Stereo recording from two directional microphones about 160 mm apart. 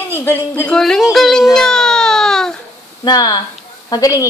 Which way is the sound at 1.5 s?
5° left (ahead or behind).